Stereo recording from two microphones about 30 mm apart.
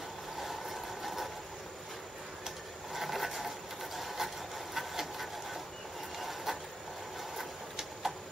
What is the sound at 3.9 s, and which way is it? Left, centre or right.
Sewing machine, centre.